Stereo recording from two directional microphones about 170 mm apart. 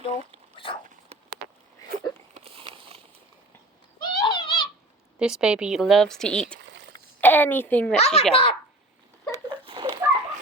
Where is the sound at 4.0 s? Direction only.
25° left (ahead or behind).